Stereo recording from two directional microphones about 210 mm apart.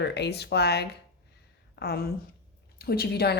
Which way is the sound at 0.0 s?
50° left (ahead or behind).